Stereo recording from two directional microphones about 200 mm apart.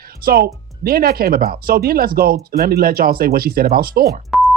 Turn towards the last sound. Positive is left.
turn(degrees=0)  # may be behind; listen again after turning